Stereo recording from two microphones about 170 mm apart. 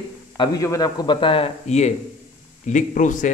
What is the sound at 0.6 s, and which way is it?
Speech, 20° left (ahead or behind).